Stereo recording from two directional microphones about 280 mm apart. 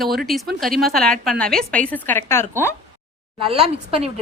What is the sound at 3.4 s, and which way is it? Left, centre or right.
Speech, centre.